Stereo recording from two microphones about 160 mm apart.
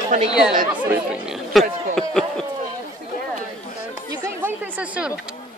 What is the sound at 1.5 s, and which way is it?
Speech, centre (ahead or behind).